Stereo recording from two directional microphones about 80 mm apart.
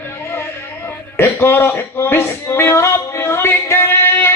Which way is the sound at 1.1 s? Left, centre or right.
Left.